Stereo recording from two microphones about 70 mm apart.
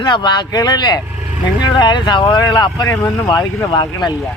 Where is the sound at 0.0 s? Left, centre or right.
Left.